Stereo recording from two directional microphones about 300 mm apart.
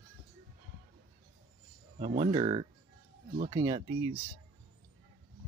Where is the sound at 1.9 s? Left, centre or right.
Centre.